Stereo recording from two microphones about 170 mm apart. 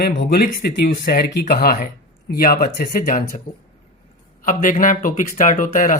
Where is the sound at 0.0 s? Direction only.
65° left (ahead or behind).